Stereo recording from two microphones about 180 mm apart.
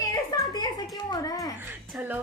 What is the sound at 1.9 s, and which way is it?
Speech, 10° right (ahead or behind).